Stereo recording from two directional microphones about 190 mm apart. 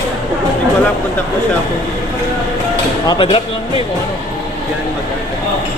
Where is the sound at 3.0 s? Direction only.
25° left (ahead or behind).